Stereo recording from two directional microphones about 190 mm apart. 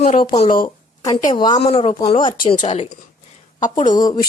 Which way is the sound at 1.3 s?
25° left (ahead or behind).